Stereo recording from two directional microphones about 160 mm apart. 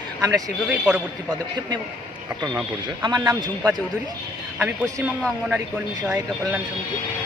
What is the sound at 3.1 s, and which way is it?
Speech, 25° right (ahead or behind).